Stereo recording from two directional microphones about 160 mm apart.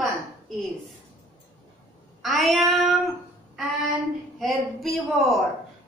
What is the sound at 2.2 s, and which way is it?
Speech, centre (ahead or behind).